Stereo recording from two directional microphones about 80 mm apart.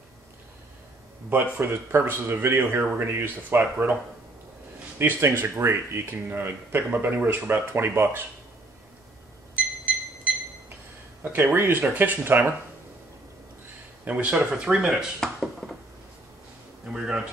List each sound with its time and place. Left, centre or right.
1.3 s speech: right
4.9 s speech: right
11.5 s speech: right
14.0 s speech: centre
16.9 s speech: centre